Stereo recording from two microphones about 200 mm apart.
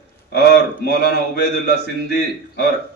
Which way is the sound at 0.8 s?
55° right (ahead or behind).